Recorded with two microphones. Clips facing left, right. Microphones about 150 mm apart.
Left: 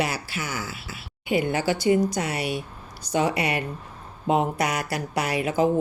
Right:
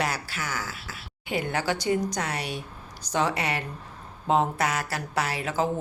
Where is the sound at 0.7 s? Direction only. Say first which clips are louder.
Left 2 dB; 40° right (ahead or behind).